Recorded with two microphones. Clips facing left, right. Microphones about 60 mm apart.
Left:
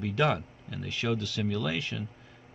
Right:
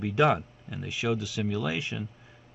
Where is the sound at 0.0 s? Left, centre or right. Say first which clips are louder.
Right 4 dB; centre.